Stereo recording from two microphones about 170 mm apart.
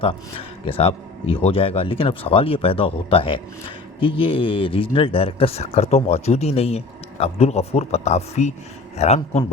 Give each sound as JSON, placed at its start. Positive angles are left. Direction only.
{"t": 0.0, "sound": "speech", "side_deg": 35}